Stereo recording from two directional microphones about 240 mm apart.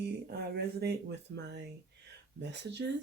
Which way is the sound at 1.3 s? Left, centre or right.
Right.